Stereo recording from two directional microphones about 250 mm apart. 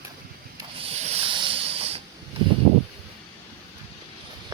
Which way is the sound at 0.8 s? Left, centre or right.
Right.